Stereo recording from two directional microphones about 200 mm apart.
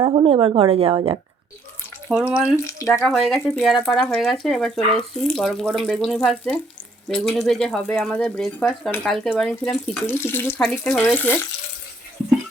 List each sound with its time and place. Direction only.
0.0 s a woman's voice: 25° right (ahead or behind)
2.0 s speech: 5° right (ahead or behind)
2.6 s speech: 15° left (ahead or behind)
3.0 s speech: centre (ahead or behind)
10.6 s speech: centre (ahead or behind)